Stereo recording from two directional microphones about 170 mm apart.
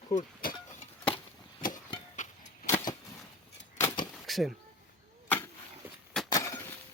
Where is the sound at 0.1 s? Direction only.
45° left (ahead or behind).